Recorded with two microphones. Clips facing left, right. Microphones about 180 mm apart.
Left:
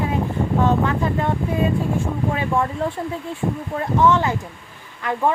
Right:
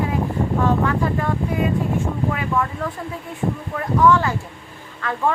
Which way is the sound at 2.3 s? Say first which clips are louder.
Left 2 dB; 30° left (ahead or behind).